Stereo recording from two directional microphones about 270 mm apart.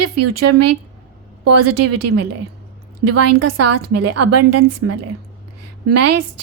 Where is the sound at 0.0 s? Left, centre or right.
Right.